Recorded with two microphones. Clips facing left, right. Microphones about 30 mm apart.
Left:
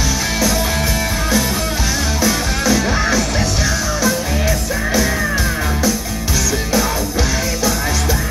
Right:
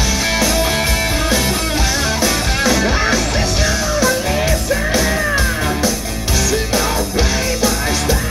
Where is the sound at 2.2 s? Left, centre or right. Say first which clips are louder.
Right 1 dB; centre.